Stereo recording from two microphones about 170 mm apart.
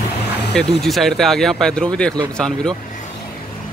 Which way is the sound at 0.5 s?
Centre (ahead or behind).